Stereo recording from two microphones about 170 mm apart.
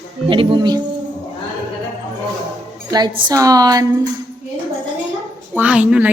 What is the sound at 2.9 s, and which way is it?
Speech, 25° right (ahead or behind).